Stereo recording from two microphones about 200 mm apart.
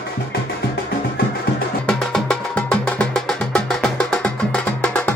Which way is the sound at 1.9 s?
5° left (ahead or behind).